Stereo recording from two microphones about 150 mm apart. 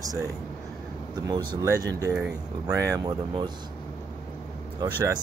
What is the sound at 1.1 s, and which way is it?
Speech, 30° right (ahead or behind).